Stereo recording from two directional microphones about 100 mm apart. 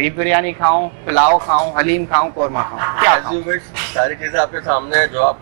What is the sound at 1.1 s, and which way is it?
Speech, 25° right (ahead or behind).